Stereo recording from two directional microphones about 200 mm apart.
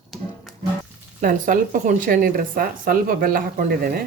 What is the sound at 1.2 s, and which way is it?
Speech, 45° right (ahead or behind).